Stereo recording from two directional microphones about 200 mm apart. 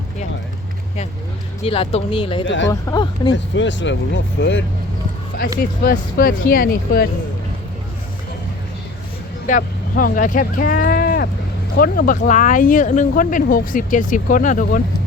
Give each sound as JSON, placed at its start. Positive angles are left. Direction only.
{"t": 1.6, "sound": "speech", "side_deg": 30}
{"t": 3.3, "sound": "speech", "side_deg": 65}
{"t": 5.8, "sound": "speech", "side_deg": 45}
{"t": 9.5, "sound": "speech", "side_deg": 45}